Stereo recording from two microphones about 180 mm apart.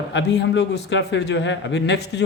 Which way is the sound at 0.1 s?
75° left (ahead or behind).